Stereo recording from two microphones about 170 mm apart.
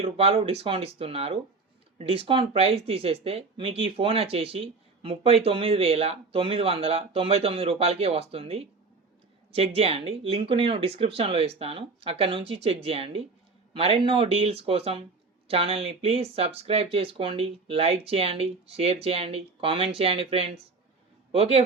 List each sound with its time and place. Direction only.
0.0 s speech: 35° right (ahead or behind)